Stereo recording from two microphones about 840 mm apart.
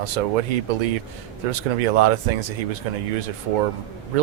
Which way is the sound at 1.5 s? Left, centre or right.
Right.